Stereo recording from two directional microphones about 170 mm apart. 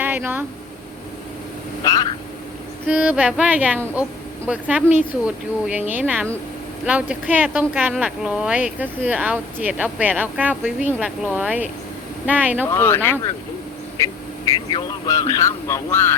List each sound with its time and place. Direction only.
0.0 s speech: 10° right (ahead or behind)
1.8 s speech: 25° left (ahead or behind)
2.8 s speech: 10° right (ahead or behind)
12.6 s speech: 15° left (ahead or behind)